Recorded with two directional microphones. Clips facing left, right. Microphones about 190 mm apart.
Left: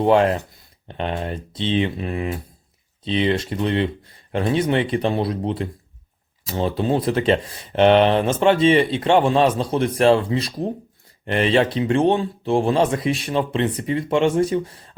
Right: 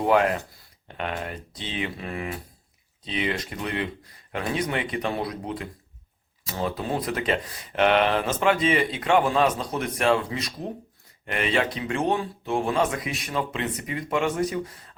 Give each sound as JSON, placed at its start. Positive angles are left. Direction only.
{"t": 0.0, "sound": "speech", "side_deg": 30}